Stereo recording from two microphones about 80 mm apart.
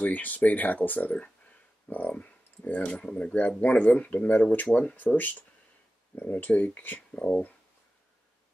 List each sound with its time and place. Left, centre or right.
0.0 s speech: centre